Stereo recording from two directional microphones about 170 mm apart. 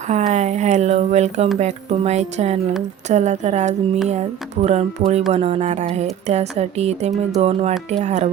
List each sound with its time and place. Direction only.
0.1 s speech: 45° right (ahead or behind)